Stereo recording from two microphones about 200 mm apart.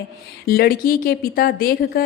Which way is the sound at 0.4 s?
50° left (ahead or behind).